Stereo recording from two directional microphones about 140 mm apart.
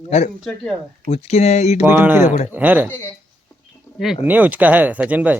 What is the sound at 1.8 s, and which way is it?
Speech, 10° right (ahead or behind).